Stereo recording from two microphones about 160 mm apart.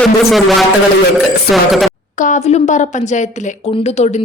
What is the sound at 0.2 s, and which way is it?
Speech, centre (ahead or behind).